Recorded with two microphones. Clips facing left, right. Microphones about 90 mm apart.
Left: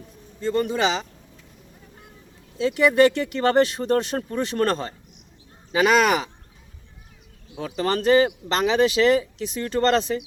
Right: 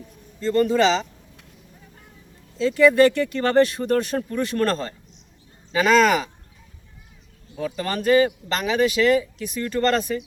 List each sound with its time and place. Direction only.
0.3 s a man's voice: 15° left (ahead or behind)
2.6 s a man's voice: 20° left (ahead or behind)
7.8 s speech: 25° left (ahead or behind)